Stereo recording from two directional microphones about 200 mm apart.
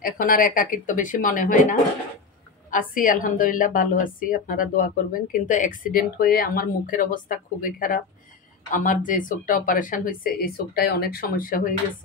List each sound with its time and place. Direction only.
0.0 s a woman's voice: 45° left (ahead or behind)